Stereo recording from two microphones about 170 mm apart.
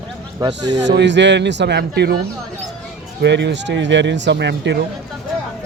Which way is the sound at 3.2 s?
90° right.